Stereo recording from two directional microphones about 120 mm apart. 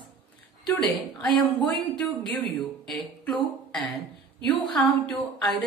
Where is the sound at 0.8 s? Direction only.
Centre (ahead or behind).